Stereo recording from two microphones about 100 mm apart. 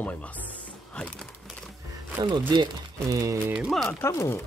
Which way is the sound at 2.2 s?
50° right (ahead or behind).